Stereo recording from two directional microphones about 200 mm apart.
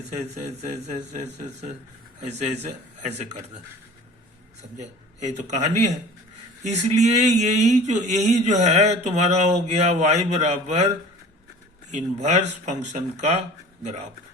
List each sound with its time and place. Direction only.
0.2 s speech: 35° right (ahead or behind)
2.4 s speech: 35° right (ahead or behind)
4.8 s speech: 35° right (ahead or behind)
11.9 s speech: 35° right (ahead or behind)